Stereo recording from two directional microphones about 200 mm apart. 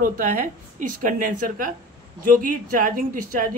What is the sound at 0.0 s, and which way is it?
Speech, 40° right (ahead or behind).